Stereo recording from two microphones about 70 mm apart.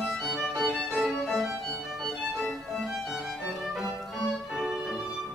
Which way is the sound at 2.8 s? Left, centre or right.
Centre.